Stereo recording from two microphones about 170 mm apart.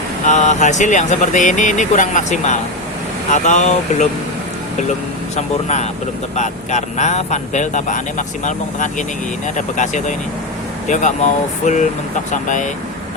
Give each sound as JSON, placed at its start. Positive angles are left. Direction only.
{"t": 0.3, "sound": "speech", "side_deg": 45}
{"t": 5.6, "sound": "speech", "side_deg": 40}